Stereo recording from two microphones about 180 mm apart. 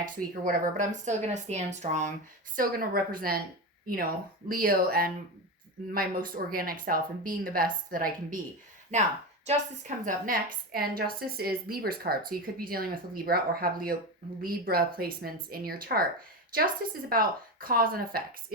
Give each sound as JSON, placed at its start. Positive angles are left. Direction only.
{"t": 0.0, "sound": "speech", "side_deg": -50}
{"t": 2.6, "sound": "a woman's voice", "side_deg": -55}
{"t": 9.5, "sound": "a woman's voice", "side_deg": -45}
{"t": 17.1, "sound": "a woman's voice", "side_deg": -55}